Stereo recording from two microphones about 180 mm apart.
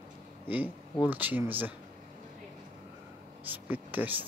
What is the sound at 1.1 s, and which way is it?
Speech, 10° right (ahead or behind).